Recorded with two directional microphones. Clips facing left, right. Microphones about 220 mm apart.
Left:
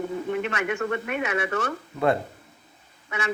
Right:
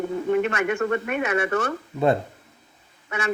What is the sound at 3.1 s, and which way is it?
Speech, 50° right (ahead or behind).